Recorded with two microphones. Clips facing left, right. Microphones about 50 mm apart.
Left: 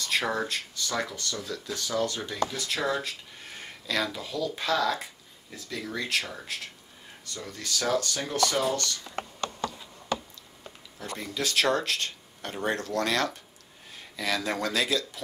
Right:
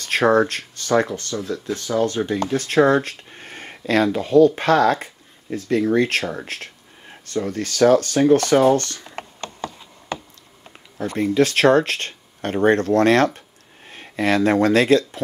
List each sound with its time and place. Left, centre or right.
0.0 s speech: right